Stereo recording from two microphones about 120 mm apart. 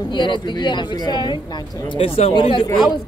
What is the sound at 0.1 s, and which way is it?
Speech, 40° left (ahead or behind).